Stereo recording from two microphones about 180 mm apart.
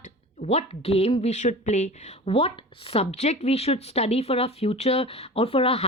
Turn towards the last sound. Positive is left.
turn(degrees=30)  # may be behind; listen again after turning